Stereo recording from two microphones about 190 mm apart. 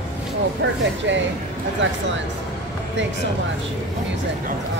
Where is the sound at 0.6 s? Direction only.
70° right (ahead or behind).